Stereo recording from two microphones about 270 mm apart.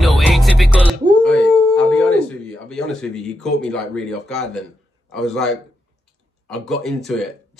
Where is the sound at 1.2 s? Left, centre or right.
Centre.